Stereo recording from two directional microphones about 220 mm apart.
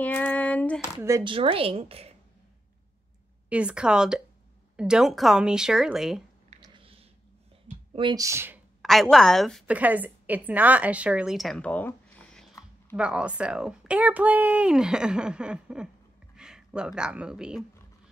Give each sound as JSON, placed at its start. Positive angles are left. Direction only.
{"t": 0.0, "sound": "a sound", "side_deg": 5}
{"t": 1.0, "sound": "a woman's voice", "side_deg": -20}
{"t": 3.4, "sound": "speech", "side_deg": -5}
{"t": 6.5, "sound": "squish", "side_deg": -25}
{"t": 7.6, "sound": "a sound", "side_deg": -25}
{"t": 8.8, "sound": "a woman's voice", "side_deg": 0}
{"t": 12.9, "sound": "speech", "side_deg": -5}